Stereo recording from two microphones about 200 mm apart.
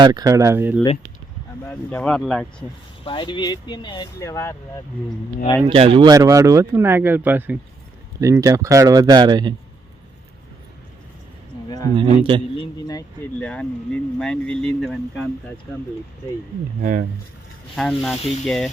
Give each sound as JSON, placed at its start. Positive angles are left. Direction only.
{"t": 0.0, "sound": "speech", "side_deg": -20}
{"t": 1.6, "sound": "speech", "side_deg": 10}
{"t": 3.0, "sound": "speech", "side_deg": 25}
{"t": 5.6, "sound": "speech", "side_deg": -30}
{"t": 11.9, "sound": "speech", "side_deg": -25}
{"t": 12.5, "sound": "speech", "side_deg": 15}
{"t": 13.4, "sound": "speech", "side_deg": 5}
{"t": 16.8, "sound": "speech", "side_deg": -40}
{"t": 17.7, "sound": "speech", "side_deg": 0}